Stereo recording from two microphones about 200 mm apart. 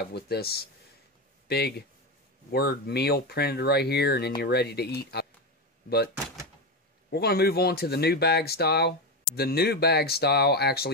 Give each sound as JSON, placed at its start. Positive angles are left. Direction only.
{"t": 0.1, "sound": "speech", "side_deg": 50}
{"t": 7.1, "sound": "speech", "side_deg": 50}